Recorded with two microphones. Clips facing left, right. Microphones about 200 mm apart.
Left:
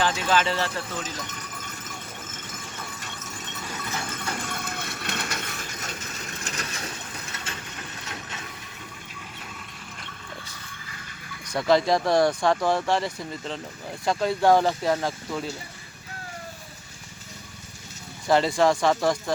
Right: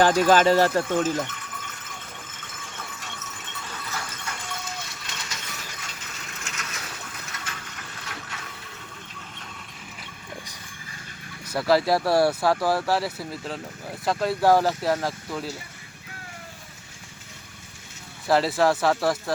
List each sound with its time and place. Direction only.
0.0 s speech: 45° right (ahead or behind)
1.3 s a sound: 40° left (ahead or behind)
4.4 s a sound: 55° left (ahead or behind)
6.4 s ratchet: 35° left (ahead or behind)
10.0 s water: 15° right (ahead or behind)
11.4 s speech: 5° right (ahead or behind)
18.3 s speech: 5° right (ahead or behind)